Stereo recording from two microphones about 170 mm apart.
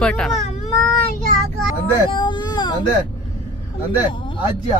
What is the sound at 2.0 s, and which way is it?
Speech, 30° left (ahead or behind).